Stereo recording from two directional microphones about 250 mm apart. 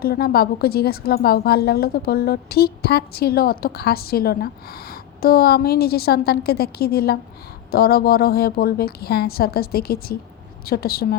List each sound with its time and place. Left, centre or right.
0.0 s a woman's voice: left